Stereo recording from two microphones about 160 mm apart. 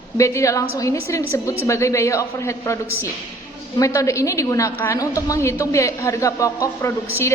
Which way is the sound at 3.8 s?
20° left (ahead or behind).